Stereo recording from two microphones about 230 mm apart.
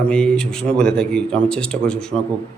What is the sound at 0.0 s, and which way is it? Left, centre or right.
Speech, centre.